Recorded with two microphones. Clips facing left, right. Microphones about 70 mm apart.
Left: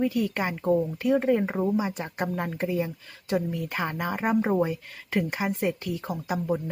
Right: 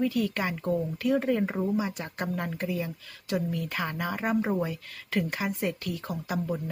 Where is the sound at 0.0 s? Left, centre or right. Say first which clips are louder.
Left 2 dB; centre.